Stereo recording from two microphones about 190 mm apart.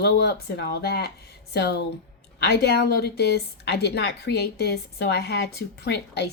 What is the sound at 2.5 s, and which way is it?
A woman's voice, 60° left (ahead or behind).